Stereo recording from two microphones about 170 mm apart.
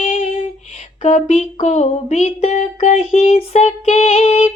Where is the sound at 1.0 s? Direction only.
40° left (ahead or behind).